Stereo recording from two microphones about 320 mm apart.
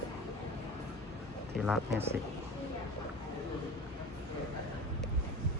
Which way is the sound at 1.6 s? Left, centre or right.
Centre.